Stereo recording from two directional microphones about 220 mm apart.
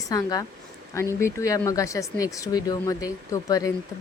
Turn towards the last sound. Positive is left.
turn(degrees=15)  # may be behind; listen again after turning